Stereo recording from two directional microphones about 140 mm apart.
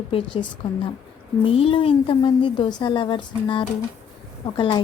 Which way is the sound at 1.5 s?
40° left (ahead or behind).